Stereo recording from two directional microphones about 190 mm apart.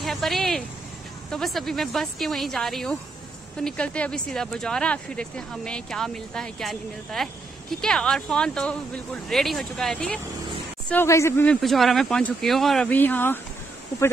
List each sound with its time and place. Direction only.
0.0 s speech: centre (ahead or behind)
11.6 s speech: centre (ahead or behind)